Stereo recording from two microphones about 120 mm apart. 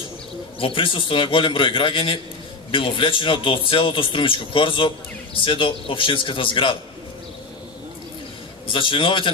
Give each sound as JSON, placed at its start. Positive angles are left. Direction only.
{"t": 0.6, "sound": "speech", "side_deg": 45}
{"t": 8.6, "sound": "speech", "side_deg": 45}